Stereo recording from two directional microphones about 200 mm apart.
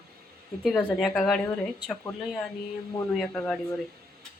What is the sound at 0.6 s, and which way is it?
Speech, 5° left (ahead or behind).